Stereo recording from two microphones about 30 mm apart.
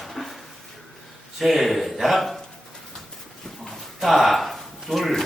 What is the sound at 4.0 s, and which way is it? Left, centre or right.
Speech, centre.